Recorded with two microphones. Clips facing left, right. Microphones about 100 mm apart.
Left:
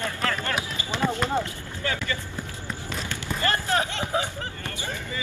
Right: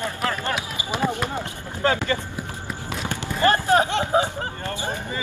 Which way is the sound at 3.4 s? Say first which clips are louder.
Right 7 dB; 25° right (ahead or behind).